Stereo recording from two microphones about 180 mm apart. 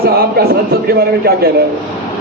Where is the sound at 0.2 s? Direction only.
60° right (ahead or behind).